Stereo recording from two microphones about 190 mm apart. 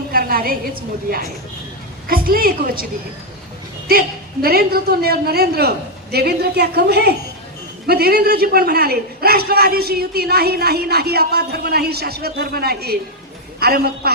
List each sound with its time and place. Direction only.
0.1 s a woman's voice: 50° right (ahead or behind)
3.8 s a man's voice: 50° right (ahead or behind)